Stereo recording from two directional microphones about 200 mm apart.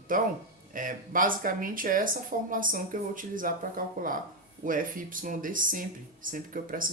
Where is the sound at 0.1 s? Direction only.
45° right (ahead or behind).